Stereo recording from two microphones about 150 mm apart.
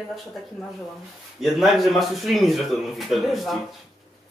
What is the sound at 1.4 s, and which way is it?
Speech, centre (ahead or behind).